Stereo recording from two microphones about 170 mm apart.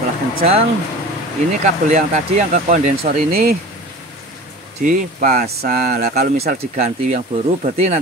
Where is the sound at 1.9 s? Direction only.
45° right (ahead or behind).